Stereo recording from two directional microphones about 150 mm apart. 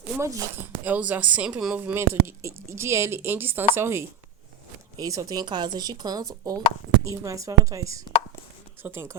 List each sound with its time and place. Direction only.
0.2 s a woman's voice: 20° right (ahead or behind)